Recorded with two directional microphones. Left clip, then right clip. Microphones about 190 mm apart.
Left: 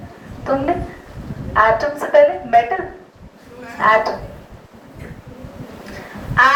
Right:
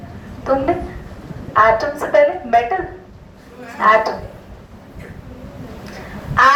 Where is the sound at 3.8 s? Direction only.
15° right (ahead or behind).